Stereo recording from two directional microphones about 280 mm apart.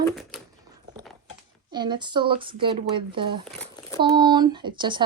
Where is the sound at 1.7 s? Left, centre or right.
Centre.